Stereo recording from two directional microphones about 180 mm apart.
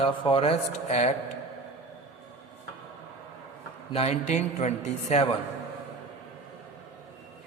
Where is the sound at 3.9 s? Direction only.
35° left (ahead or behind).